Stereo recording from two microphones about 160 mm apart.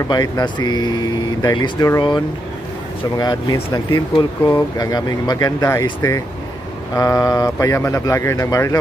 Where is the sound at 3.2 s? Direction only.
25° left (ahead or behind).